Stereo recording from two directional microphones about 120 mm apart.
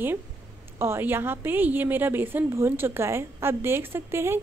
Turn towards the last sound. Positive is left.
turn(degrees=-20)  # may be behind; listen again after turning